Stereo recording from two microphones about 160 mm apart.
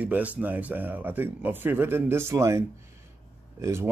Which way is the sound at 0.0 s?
10° right (ahead or behind).